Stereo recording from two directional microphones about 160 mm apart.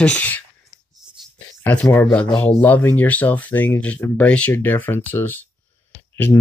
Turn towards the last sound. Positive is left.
turn(degrees=15)  # may be behind; listen again after turning